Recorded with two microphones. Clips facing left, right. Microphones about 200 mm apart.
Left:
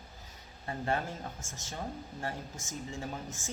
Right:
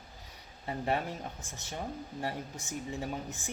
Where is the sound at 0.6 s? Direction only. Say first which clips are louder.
Right 1 dB; 15° right (ahead or behind).